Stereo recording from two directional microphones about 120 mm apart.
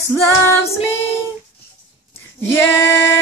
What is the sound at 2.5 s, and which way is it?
Female singing, 20° left (ahead or behind).